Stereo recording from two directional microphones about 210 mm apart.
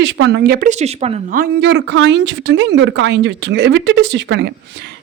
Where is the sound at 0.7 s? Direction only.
30° right (ahead or behind).